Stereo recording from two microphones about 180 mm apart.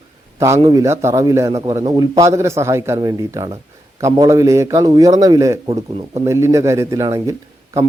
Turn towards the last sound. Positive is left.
turn(degrees=-15)  # may be behind; listen again after turning